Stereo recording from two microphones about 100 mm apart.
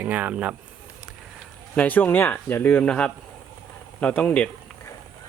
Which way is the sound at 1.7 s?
15° left (ahead or behind).